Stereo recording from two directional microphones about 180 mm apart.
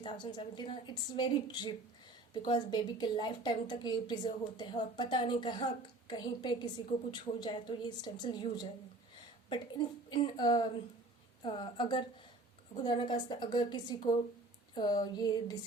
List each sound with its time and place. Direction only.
0.0 s a woman's voice: 25° left (ahead or behind)